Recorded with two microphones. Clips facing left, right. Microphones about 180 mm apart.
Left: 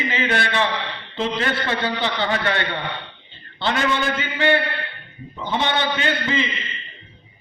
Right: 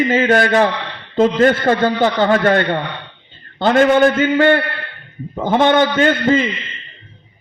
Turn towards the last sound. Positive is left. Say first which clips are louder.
# right 9 dB
turn(degrees=-50)  # may be behind; listen again after turning